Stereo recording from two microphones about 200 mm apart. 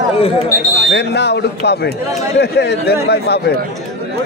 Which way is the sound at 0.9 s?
55° left (ahead or behind).